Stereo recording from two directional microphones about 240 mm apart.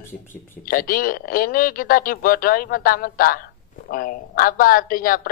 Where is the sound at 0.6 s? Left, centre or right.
Left.